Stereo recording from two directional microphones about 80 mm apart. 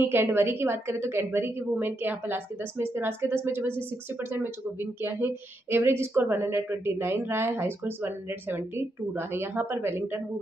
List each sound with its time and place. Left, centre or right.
0.0 s a woman's voice: right